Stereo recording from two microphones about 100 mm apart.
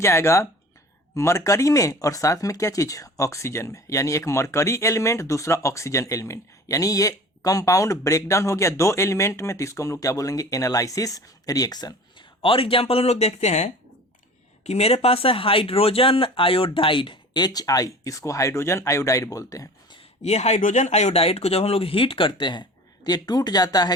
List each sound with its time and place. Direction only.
0.0 s speech: 25° left (ahead or behind); by 13.3 s 90° left
14.6 s speech: 90° left; by 19.7 s 35° left (ahead or behind)
19.9 s speech: 80° left; by 23.9 s 40° left (ahead or behind)